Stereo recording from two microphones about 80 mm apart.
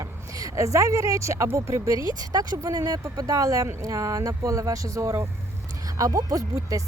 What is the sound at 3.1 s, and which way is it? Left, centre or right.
Speech, right.